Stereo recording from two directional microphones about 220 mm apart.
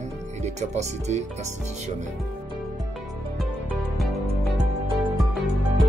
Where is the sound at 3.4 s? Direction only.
Centre (ahead or behind).